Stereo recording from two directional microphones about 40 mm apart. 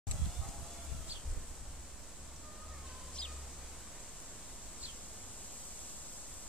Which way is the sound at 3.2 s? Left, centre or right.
Left.